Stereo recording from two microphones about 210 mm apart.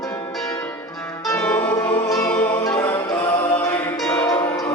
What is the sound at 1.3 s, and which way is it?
Music, 10° left (ahead or behind).